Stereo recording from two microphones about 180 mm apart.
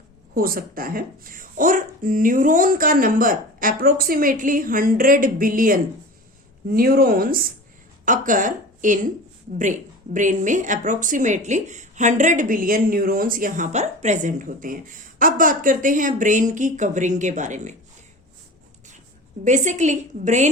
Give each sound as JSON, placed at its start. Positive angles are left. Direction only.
{"t": 0.3, "sound": "speech", "side_deg": -55}
{"t": 10.2, "sound": "speech", "side_deg": -45}
{"t": 19.5, "sound": "a woman's voice", "side_deg": -45}